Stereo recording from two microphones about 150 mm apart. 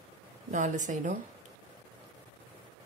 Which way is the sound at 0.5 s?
60° right (ahead or behind).